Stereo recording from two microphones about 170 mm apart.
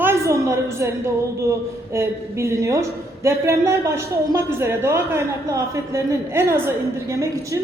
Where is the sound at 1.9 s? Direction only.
15° right (ahead or behind).